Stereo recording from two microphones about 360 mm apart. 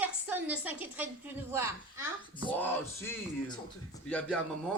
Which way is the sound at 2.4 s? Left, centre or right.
Centre.